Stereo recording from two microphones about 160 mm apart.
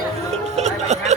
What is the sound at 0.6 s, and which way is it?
Music, 45° right (ahead or behind).